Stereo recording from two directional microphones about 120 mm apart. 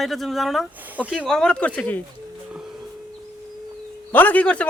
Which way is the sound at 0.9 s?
10° right (ahead or behind).